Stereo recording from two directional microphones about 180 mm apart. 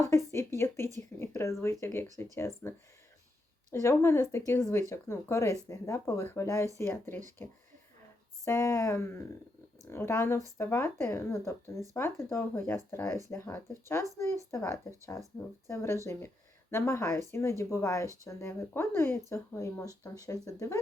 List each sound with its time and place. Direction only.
0.3 s speech: 15° left (ahead or behind)